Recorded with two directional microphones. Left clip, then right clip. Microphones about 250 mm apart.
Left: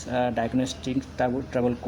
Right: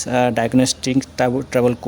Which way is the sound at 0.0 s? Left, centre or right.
Right.